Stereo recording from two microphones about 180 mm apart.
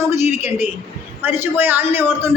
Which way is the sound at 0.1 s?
15° right (ahead or behind).